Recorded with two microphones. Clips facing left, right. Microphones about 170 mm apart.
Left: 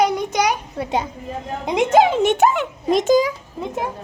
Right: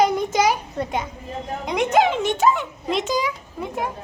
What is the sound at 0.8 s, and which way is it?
A woman's voice, 30° left (ahead or behind).